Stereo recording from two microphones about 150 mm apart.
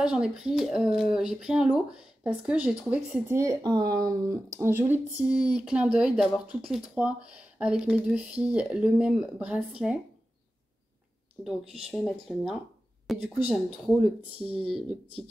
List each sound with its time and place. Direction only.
0.0 s speech: 5° right (ahead or behind)
3.3 s speech: 25° right (ahead or behind); by 9.9 s 10° right (ahead or behind)
11.4 s speech: 5° right (ahead or behind)
14.5 s speech: 40° right (ahead or behind)